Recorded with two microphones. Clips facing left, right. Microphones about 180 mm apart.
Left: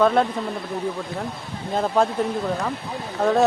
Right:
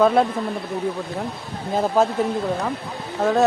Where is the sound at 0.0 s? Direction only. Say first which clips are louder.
Right 2 dB; 5° right (ahead or behind).